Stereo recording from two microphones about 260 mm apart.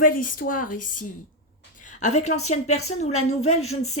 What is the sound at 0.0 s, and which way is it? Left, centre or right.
A woman's voice, left.